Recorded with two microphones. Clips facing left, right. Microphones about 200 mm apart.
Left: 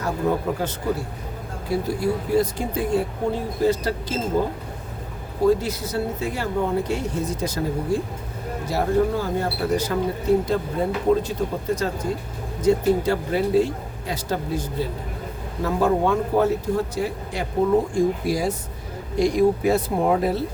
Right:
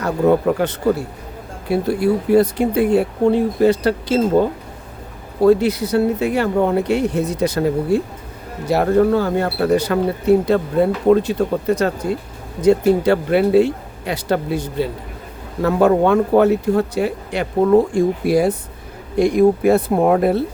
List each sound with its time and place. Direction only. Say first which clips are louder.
0.0 s speech: right 8 dB; 70° right (ahead or behind)